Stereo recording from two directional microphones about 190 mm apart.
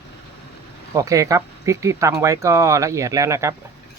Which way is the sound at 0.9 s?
15° right (ahead or behind).